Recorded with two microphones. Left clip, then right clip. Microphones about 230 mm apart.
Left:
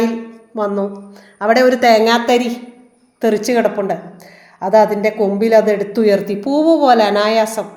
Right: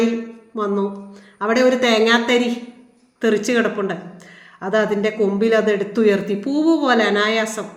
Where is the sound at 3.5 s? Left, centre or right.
Centre.